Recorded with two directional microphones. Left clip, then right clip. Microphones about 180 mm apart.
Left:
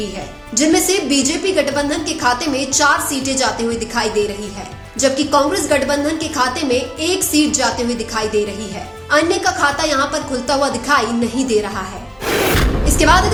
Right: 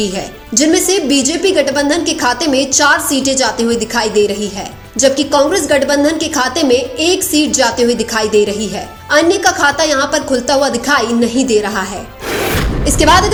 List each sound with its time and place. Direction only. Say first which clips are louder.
0.5 s a woman's voice: right 3 dB; 35° right (ahead or behind)
12.3 s music: even; centre (ahead or behind)
12.8 s speech: right 4 dB; 30° right (ahead or behind)